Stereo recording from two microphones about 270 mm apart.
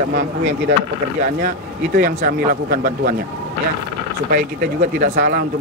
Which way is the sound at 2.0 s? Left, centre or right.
Right.